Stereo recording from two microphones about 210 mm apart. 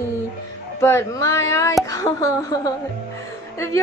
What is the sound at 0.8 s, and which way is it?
A woman's voice, 10° left (ahead or behind).